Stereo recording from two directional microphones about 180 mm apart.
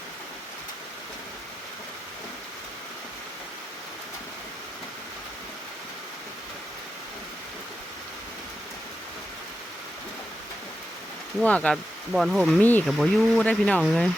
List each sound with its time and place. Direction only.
11.3 s speech: 5° left (ahead or behind)
12.5 s speech: 10° left (ahead or behind)